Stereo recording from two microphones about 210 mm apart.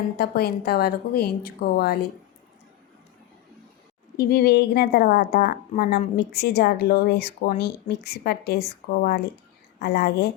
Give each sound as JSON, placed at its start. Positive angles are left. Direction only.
{"t": 0.2, "sound": "a woman's voice", "side_deg": 50}
{"t": 4.2, "sound": "a woman's voice", "side_deg": 50}